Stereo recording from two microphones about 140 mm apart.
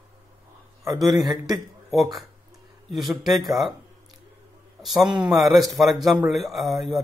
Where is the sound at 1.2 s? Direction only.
30° right (ahead or behind).